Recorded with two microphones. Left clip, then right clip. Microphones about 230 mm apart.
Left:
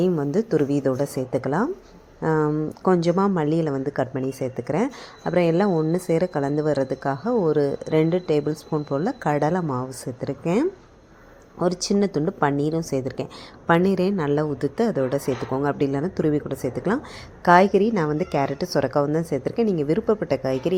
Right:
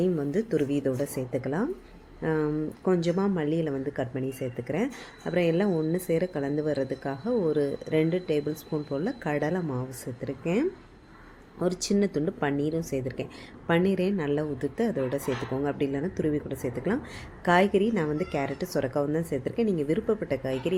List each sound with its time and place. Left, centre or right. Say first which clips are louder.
0.0 s speech: left 5 dB; centre